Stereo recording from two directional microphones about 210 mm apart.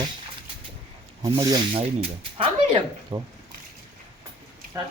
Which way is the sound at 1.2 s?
20° right (ahead or behind).